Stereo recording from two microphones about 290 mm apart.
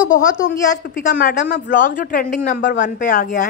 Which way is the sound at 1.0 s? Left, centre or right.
Left.